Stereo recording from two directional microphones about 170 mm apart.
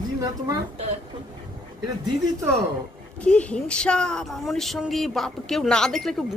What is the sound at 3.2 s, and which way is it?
A woman's voice, 5° left (ahead or behind).